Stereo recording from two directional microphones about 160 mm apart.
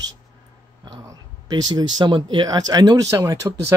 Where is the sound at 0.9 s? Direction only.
25° right (ahead or behind).